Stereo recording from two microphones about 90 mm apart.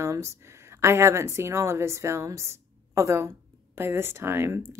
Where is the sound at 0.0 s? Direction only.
30° right (ahead or behind).